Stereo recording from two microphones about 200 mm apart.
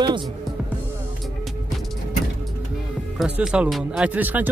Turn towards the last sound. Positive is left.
turn(degrees=-10)  # may be behind; listen again after turning